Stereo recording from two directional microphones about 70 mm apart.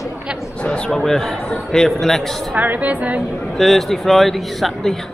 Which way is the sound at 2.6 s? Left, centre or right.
Right.